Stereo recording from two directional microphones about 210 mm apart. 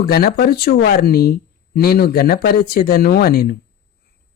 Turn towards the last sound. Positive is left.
turn(degrees=45)  # may be behind; listen again after turning